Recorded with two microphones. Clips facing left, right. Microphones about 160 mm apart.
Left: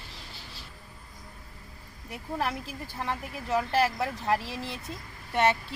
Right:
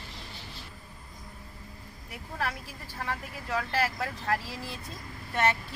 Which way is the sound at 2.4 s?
20° left (ahead or behind).